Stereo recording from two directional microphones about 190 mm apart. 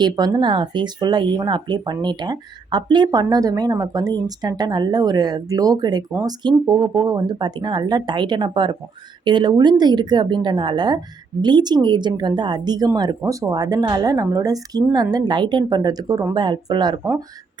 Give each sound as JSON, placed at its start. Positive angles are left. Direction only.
{"t": 0.0, "sound": "speech", "side_deg": -20}